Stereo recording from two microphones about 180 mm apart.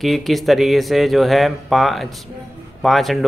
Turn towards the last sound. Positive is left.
turn(degrees=0)  # may be behind; listen again after turning